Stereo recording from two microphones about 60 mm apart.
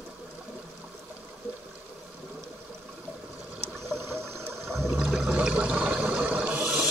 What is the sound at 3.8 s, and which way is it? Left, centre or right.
Water, right.